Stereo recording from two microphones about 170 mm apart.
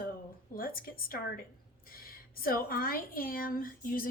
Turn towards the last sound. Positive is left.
turn(degrees=55)  # may be behind; listen again after turning